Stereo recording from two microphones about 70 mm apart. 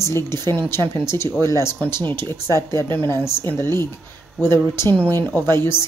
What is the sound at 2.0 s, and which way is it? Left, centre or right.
Speech, left.